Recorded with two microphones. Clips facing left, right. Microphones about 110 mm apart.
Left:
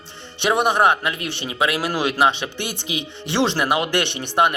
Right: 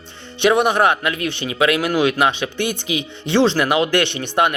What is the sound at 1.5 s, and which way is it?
Speech, 30° left (ahead or behind).